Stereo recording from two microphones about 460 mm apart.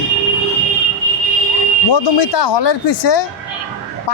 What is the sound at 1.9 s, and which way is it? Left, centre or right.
Speech, left.